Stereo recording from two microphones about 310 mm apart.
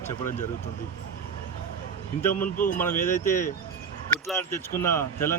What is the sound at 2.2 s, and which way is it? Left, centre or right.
Speech, centre.